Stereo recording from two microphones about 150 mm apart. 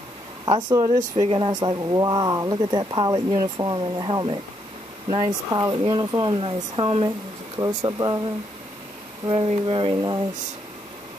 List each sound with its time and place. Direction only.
0.5 s speech: 30° right (ahead or behind)
9.2 s speech: 35° right (ahead or behind)